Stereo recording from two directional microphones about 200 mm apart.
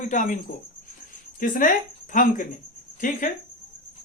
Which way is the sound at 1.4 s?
40° left (ahead or behind).